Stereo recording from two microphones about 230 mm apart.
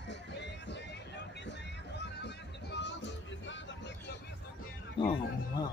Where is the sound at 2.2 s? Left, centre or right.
Left.